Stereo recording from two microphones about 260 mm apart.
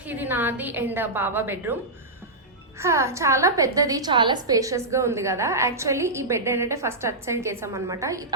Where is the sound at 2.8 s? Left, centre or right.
Centre.